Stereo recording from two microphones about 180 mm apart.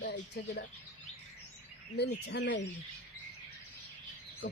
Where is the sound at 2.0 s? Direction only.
70° left (ahead or behind).